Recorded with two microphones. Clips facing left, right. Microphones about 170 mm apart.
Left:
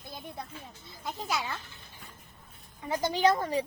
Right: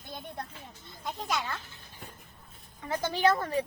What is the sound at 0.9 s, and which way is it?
Speech, centre (ahead or behind).